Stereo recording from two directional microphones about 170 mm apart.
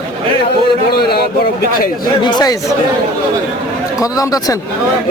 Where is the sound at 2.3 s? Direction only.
25° left (ahead or behind).